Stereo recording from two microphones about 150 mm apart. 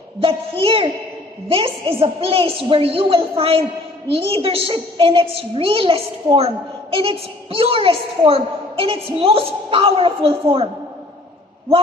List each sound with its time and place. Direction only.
0.2 s a woman's voice: 35° right (ahead or behind)